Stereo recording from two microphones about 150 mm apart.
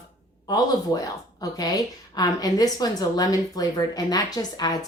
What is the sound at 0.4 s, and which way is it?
Speech, 25° left (ahead or behind).